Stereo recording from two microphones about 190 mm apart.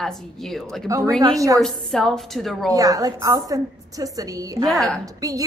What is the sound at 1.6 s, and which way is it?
A woman's voice, centre (ahead or behind).